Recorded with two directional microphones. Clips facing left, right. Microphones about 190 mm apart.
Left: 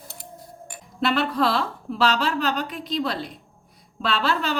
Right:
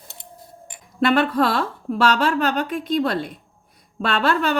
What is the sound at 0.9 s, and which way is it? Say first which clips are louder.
A woman's voice: right 5 dB; 50° right (ahead or behind).